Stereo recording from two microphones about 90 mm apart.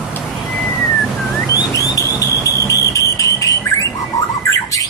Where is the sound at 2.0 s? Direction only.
40° left (ahead or behind).